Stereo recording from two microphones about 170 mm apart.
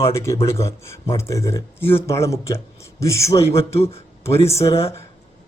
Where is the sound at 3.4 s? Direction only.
35° left (ahead or behind).